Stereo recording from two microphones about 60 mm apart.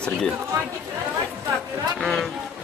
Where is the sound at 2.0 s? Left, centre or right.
Centre.